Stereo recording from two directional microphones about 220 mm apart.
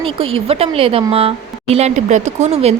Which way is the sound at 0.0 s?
25° right (ahead or behind).